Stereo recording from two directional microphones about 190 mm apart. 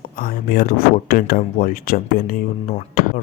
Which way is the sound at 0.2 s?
50° left (ahead or behind).